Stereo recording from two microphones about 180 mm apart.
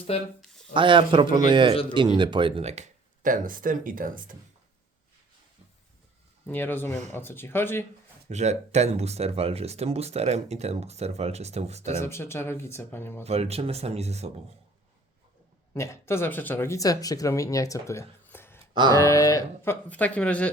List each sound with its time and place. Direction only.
0.1 s speech: 30° left (ahead or behind)
0.4 s a sound: centre (ahead or behind)
0.7 s speech: 25° right (ahead or behind)
1.7 s speech: 30° left (ahead or behind)
2.0 s speech: 25° right (ahead or behind); by 4.4 s 50° right (ahead or behind)
6.5 s speech: 10° left (ahead or behind)
8.3 s speech: 40° right (ahead or behind)
11.9 s speech: 15° left (ahead or behind)
13.2 s speech: 35° right (ahead or behind)
15.7 s speech: 15° left (ahead or behind)
18.6 s a sound: 25° right (ahead or behind)
18.9 s speech: 15° left (ahead or behind)
19.9 s speech: 10° left (ahead or behind)